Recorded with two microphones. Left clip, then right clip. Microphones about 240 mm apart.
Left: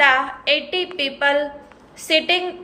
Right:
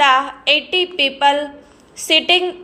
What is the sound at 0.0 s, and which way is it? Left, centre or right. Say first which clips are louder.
A woman's voice: right 2 dB; centre.